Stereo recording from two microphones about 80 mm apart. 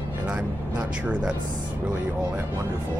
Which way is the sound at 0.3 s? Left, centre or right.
Centre.